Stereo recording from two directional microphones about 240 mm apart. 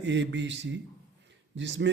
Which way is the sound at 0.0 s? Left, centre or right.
Right.